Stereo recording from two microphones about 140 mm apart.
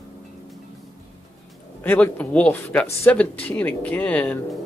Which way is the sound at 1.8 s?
10° left (ahead or behind).